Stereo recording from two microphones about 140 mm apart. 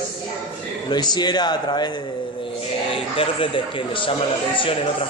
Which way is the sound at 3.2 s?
40° left (ahead or behind).